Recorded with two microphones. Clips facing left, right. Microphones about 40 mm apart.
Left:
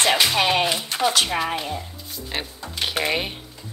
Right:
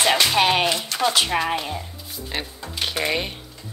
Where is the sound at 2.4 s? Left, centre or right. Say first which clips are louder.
Even; centre.